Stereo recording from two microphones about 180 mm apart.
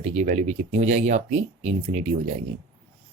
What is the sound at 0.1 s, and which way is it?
Speech, 40° right (ahead or behind).